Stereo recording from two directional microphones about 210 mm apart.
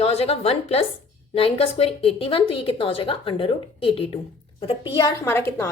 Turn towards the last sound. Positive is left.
turn(degrees=10)  # may be behind; listen again after turning